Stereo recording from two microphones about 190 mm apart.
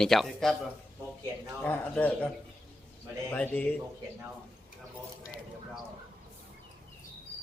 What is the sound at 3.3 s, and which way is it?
Speech, 10° left (ahead or behind).